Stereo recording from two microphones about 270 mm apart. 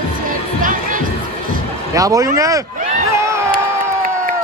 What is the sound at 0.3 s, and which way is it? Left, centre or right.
Music, right.